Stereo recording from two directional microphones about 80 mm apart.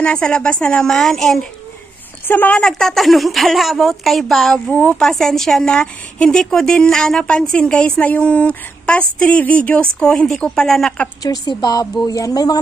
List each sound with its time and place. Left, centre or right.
0.0 s a woman's voice: centre
2.2 s a woman's voice: left
2.6 s a woman's voice: centre
4.6 s a woman's voice: centre
11.2 s speech: left